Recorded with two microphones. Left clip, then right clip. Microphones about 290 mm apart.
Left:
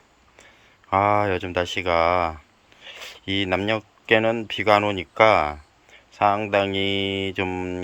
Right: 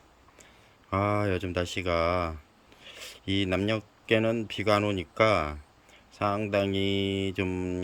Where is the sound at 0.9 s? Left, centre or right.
Centre.